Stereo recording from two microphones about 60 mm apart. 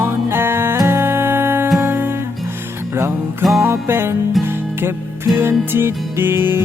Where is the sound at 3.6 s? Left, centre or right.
Right.